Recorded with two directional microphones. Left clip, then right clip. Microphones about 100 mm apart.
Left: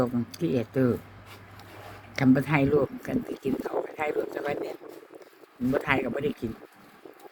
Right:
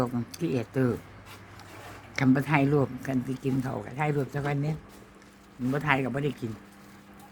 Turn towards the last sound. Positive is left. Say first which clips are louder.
# left 1 dB
turn(degrees=-10)  # may be behind; listen again after turning